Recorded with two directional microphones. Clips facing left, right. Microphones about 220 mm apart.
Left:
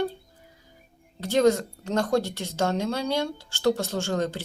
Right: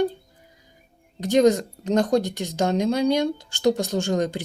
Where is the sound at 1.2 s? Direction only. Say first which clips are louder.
Right 3 dB; 15° right (ahead or behind).